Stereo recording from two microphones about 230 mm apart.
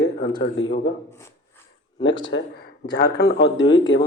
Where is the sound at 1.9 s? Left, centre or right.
Centre.